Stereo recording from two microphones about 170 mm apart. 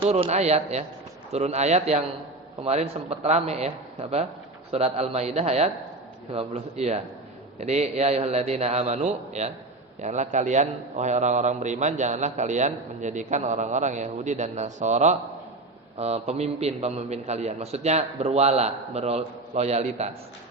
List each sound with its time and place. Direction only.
0.1 s a man's voice: 40° right (ahead or behind)
4.7 s a man's voice: 35° right (ahead or behind)